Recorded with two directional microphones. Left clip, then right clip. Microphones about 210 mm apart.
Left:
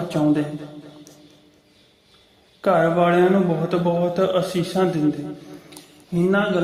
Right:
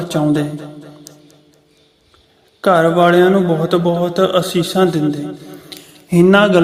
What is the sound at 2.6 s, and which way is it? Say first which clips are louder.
A man's voice: right 6 dB; 15° right (ahead or behind).